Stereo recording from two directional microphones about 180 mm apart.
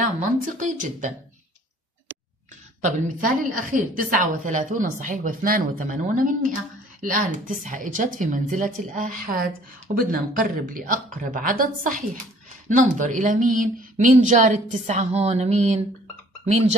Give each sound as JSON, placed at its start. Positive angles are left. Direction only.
{"t": 0.0, "sound": "a woman's voice", "side_deg": -45}
{"t": 2.8, "sound": "a woman's voice", "side_deg": -45}